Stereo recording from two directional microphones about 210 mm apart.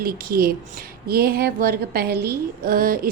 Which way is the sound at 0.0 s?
45° right (ahead or behind).